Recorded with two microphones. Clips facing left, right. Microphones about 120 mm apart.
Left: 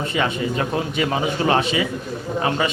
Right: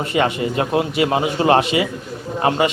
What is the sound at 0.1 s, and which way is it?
Speech, 55° right (ahead or behind).